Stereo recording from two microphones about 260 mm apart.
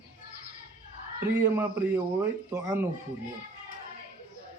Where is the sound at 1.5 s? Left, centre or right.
Centre.